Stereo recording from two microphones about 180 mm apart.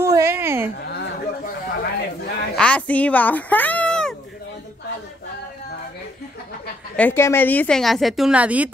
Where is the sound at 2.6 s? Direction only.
5° left (ahead or behind).